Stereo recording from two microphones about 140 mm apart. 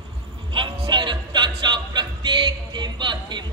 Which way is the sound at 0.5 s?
35° right (ahead or behind).